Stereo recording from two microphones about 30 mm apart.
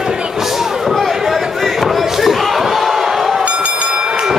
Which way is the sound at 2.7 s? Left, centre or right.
Centre.